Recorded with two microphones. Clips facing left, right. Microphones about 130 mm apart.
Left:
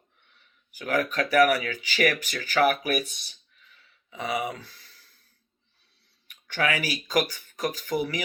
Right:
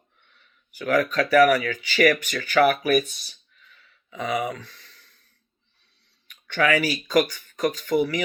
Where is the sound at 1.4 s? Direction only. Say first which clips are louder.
Right 4 dB; 45° right (ahead or behind).